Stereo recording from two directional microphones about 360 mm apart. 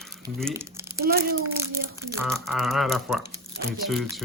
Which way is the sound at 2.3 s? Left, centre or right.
Centre.